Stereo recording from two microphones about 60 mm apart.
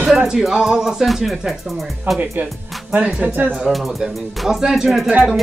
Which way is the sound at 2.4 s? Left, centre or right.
Right.